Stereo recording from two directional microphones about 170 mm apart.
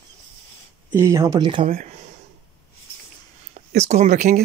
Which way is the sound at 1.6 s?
45° right (ahead or behind).